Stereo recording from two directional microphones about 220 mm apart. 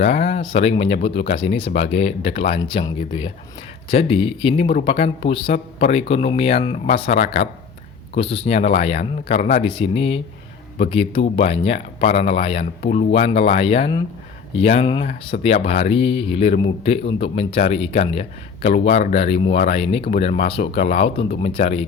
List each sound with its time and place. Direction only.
0.0 s a man's voice: 30° left (ahead or behind)
12.8 s a man's voice: 35° left (ahead or behind)